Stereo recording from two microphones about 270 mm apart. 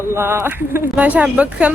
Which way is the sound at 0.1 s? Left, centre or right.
Centre.